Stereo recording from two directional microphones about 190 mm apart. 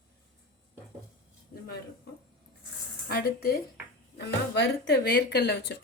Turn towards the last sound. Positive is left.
turn(degrees=60)  # may be behind; listen again after turning